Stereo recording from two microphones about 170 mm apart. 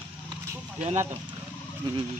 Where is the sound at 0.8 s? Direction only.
45° right (ahead or behind).